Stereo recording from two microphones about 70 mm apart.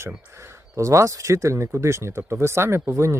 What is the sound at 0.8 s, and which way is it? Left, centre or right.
Speech, right.